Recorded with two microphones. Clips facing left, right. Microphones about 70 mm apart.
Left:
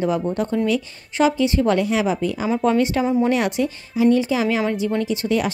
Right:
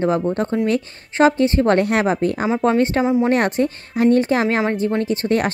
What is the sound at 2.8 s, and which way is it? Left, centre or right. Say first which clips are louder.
A woman's voice: right 2 dB; right.